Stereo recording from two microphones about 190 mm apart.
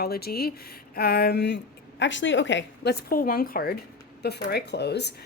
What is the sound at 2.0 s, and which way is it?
Speech, 75° left (ahead or behind).